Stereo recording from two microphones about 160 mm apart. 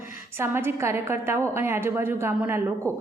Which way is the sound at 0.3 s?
15° right (ahead or behind).